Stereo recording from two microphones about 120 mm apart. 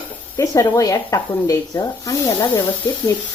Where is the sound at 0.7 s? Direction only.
30° left (ahead or behind).